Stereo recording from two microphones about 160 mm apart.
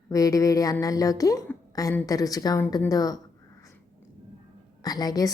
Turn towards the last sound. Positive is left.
turn(degrees=25)  # may be behind; listen again after turning